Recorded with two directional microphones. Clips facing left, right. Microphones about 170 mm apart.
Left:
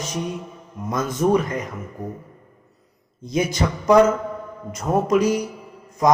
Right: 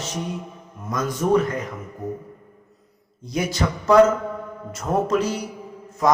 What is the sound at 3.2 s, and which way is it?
A man's voice, 20° left (ahead or behind).